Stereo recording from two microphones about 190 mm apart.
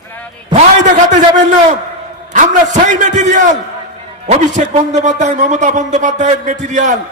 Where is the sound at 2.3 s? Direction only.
40° right (ahead or behind).